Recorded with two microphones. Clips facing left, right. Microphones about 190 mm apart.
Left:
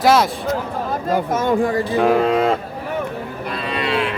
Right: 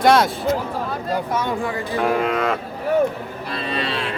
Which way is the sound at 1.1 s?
45° left (ahead or behind).